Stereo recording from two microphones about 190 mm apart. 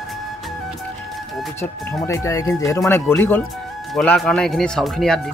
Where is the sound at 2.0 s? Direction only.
15° left (ahead or behind).